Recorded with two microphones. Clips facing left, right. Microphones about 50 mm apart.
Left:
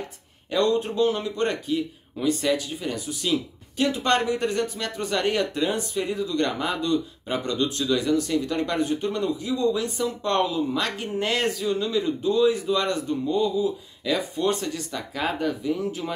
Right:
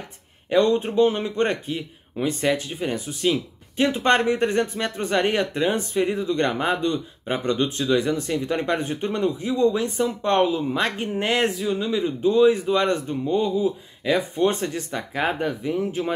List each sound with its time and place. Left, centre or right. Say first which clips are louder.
0.5 s a man's voice: right 3 dB; right